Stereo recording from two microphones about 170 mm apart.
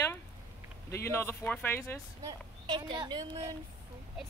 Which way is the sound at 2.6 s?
25° right (ahead or behind).